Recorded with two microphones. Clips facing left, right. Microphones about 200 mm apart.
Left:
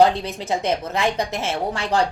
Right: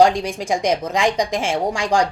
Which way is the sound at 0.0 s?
15° right (ahead or behind).